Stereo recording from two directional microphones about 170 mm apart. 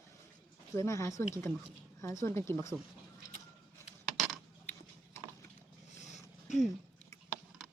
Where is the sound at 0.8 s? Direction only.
15° left (ahead or behind).